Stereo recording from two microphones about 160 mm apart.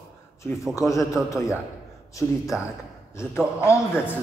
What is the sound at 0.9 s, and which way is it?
A man's voice, 20° left (ahead or behind).